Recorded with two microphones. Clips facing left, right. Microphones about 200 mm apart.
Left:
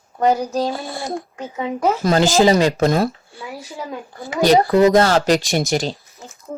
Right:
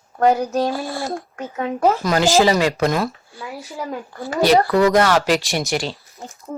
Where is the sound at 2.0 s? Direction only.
25° left (ahead or behind).